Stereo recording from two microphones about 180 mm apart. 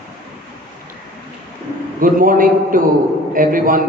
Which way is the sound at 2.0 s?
50° right (ahead or behind).